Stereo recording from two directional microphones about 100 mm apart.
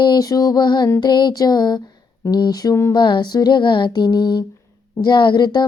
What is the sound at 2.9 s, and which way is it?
Female singing, 50° left (ahead or behind).